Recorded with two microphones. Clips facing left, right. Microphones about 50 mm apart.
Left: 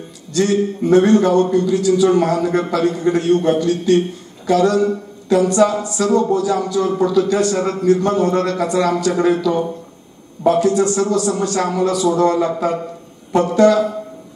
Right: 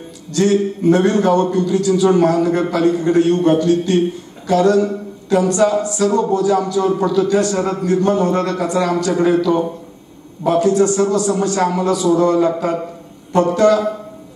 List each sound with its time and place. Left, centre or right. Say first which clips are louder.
0.3 s a man's voice: right 1 dB; centre